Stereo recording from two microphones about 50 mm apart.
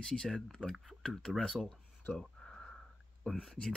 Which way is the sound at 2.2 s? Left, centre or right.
Centre.